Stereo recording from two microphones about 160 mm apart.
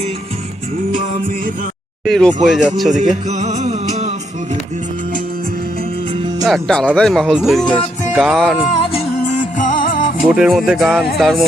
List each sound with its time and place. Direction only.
2.0 s speech: centre (ahead or behind)
3.2 s music: 45° right (ahead or behind)
6.4 s speech: 5° left (ahead or behind)
8.8 s music: 40° left (ahead or behind)
9.6 s music: 55° left (ahead or behind)
10.2 s speech: 5° right (ahead or behind)